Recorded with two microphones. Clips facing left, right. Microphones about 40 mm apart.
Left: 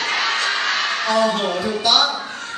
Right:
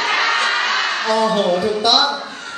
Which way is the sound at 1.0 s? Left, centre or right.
Centre.